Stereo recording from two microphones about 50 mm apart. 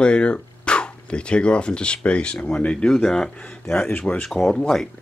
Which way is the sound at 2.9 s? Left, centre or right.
Centre.